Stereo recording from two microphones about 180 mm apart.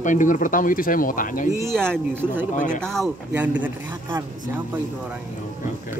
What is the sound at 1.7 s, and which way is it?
Speech, 5° left (ahead or behind).